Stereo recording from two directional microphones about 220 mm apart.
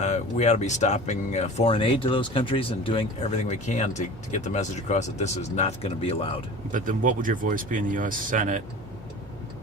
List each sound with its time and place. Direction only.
0.0 s speech: 30° left (ahead or behind)
6.7 s speech: 35° right (ahead or behind)